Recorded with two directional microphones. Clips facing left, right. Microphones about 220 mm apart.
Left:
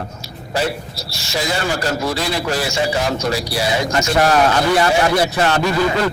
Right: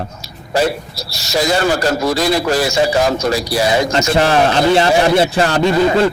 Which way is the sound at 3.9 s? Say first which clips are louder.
Right 2 dB; 25° right (ahead or behind).